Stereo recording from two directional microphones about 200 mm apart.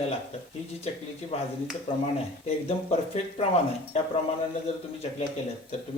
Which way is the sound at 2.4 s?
30° left (ahead or behind).